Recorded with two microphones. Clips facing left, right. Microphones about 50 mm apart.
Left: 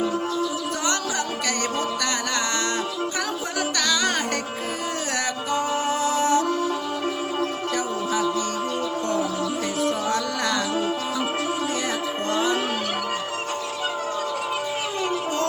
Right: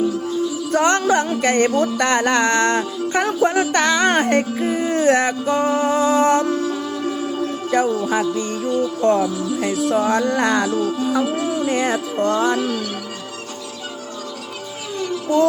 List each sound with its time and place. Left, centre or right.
0.7 s music: right
6.5 s music: left
7.7 s music: right
10.7 s music: left
11.6 s music: right
15.1 s music: left